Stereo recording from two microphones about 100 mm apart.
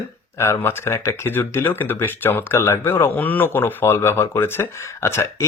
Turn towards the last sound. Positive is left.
turn(degrees=25)  # may be behind; listen again after turning